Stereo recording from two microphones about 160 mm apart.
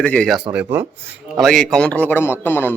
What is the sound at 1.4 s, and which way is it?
A man's voice, 5° left (ahead or behind).